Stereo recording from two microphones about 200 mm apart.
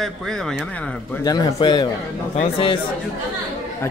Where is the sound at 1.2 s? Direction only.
20° left (ahead or behind).